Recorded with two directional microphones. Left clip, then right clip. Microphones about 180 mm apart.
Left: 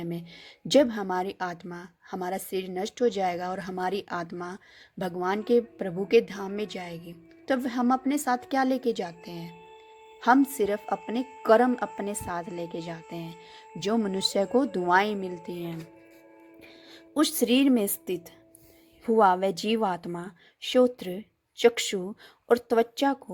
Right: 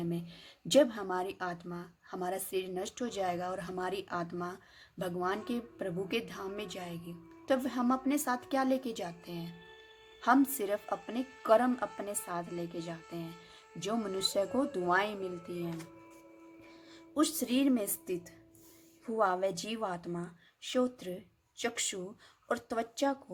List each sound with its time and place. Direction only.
0.0 s a woman's voice: 35° left (ahead or behind)
17.2 s a woman's voice: 35° left (ahead or behind)